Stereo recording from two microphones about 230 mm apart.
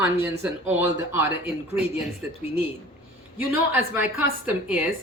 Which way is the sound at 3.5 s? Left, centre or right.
Centre.